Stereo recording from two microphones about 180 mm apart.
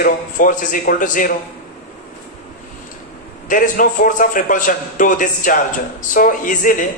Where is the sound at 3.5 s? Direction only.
45° left (ahead or behind).